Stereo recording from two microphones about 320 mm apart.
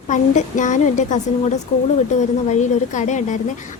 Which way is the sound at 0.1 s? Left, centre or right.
Left.